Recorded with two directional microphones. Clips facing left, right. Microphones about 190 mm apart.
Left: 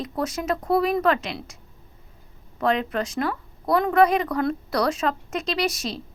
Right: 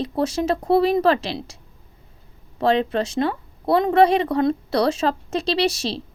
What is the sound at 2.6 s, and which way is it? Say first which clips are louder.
A woman's voice: right 4 dB; 30° right (ahead or behind).